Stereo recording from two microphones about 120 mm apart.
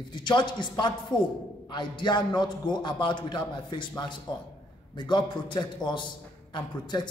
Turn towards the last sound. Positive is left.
turn(degrees=35)  # may be behind; listen again after turning